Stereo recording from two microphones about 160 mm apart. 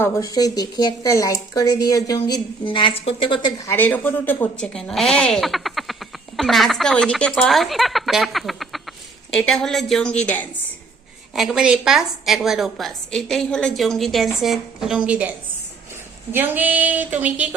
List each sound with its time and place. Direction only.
0.0 s speech: 20° left (ahead or behind)
3.7 s a woman's voice: 10° left (ahead or behind)
11.3 s a woman's voice: 5° right (ahead or behind)
16.3 s a sound: 10° right (ahead or behind)